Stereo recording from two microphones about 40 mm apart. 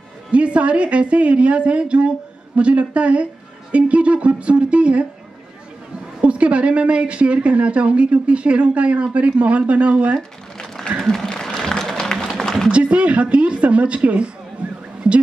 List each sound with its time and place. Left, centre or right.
0.3 s a woman's voice: right
6.2 s a woman's voice: right
10.9 s applause: right
11.4 s applause: centre
12.4 s a sound: centre
12.7 s speech: right
14.6 s a sound: right